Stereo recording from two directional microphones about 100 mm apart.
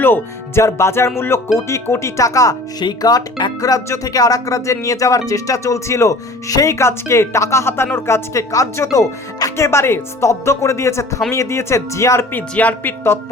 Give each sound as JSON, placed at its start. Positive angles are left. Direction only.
{"t": 0.0, "sound": "speech", "side_deg": 20}
{"t": 12.5, "sound": "speech", "side_deg": 15}